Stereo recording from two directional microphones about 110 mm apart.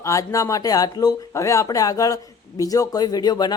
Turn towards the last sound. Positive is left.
turn(degrees=40)  # may be behind; listen again after turning